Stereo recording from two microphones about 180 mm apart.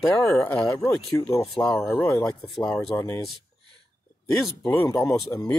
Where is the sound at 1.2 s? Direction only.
25° left (ahead or behind).